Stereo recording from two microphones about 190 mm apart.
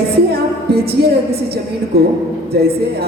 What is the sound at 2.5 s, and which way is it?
Speech, 55° right (ahead or behind).